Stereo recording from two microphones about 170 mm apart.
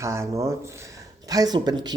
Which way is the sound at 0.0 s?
15° right (ahead or behind).